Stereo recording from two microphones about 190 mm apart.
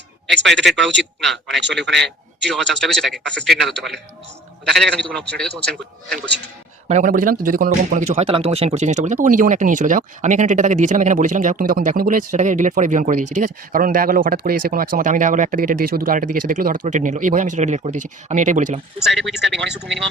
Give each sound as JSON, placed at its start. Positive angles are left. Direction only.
{"t": 0.4, "sound": "a man's voice", "side_deg": 0}
{"t": 6.8, "sound": "speech", "side_deg": -40}
{"t": 19.0, "sound": "a man's voice", "side_deg": 0}